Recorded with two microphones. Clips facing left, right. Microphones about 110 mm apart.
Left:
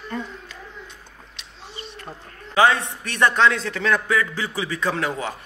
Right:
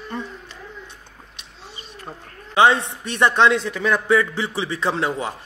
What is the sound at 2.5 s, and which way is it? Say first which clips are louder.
A man's voice: right 2 dB; 25° right (ahead or behind).